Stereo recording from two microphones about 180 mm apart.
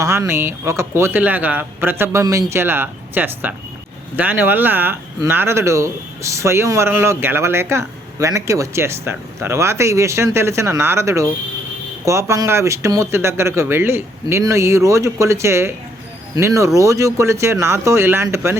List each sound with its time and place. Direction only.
0.0 s speech: 15° right (ahead or behind)